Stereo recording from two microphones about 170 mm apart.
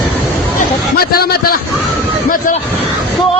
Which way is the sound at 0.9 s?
65° left (ahead or behind).